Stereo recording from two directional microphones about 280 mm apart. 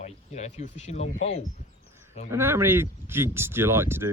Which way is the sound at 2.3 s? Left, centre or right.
Centre.